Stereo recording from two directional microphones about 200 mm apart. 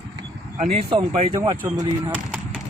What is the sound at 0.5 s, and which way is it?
Speech, 30° right (ahead or behind).